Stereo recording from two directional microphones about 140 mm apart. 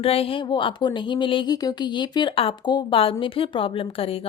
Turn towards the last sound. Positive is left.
turn(degrees=45)  # may be behind; listen again after turning